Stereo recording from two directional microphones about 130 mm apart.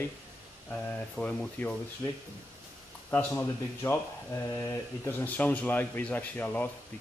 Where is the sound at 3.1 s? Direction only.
15° left (ahead or behind).